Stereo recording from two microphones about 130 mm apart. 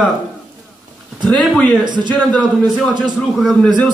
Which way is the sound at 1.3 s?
5° left (ahead or behind).